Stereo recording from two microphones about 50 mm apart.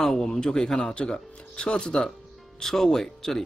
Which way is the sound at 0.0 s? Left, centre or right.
Centre.